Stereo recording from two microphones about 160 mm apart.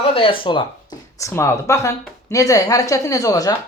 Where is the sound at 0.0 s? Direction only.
35° left (ahead or behind).